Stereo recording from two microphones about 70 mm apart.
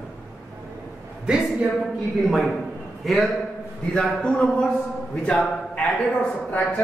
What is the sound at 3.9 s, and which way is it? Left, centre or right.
Speech, centre.